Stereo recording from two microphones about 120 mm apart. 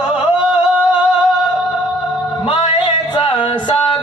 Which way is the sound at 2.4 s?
40° left (ahead or behind).